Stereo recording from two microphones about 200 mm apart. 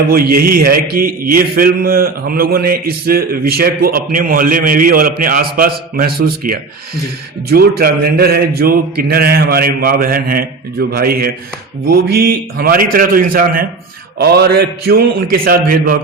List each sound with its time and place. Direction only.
0.1 s a man's voice: 45° right (ahead or behind)